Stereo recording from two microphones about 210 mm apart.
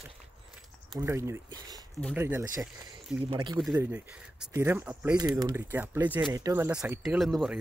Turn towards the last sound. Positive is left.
turn(degrees=0)  # may be behind; listen again after turning